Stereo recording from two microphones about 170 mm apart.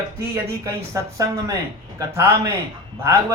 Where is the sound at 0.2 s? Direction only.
15° right (ahead or behind).